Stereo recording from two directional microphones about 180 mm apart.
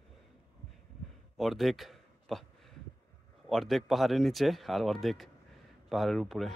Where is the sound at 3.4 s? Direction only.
Centre (ahead or behind).